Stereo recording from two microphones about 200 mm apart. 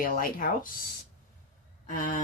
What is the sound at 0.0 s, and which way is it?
Speech, 45° left (ahead or behind).